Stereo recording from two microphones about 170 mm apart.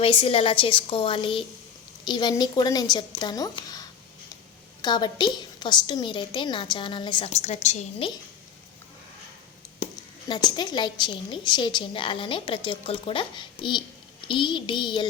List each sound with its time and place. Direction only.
0.0 s a woman's voice: 35° left (ahead or behind)
7.4 s a woman's voice: 40° left (ahead or behind)
10.2 s a woman's voice: 25° left (ahead or behind)